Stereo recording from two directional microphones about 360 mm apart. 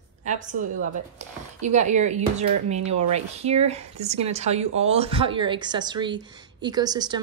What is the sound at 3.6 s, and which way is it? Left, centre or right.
Speech, centre.